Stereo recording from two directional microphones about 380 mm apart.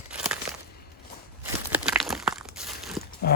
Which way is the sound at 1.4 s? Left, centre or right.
Centre.